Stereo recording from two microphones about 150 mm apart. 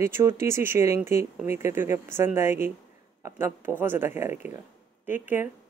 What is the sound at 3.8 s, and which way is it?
A woman's voice, 15° right (ahead or behind).